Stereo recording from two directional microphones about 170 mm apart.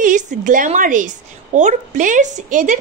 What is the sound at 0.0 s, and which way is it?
A woman's voice, 50° right (ahead or behind).